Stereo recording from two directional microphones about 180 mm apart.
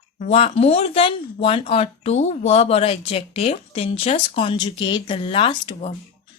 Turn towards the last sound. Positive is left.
turn(degrees=30)  # may be behind; listen again after turning